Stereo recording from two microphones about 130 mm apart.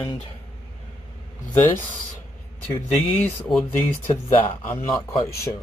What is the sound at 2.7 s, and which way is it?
Speech, 15° left (ahead or behind).